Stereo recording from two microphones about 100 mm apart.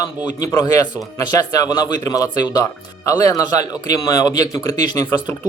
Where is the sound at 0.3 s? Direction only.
40° left (ahead or behind).